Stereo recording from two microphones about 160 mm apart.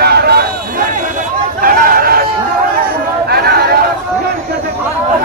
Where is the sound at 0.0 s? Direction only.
80° right.